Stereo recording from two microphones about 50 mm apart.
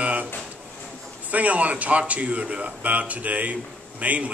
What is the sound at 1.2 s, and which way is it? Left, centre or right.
Speech, right.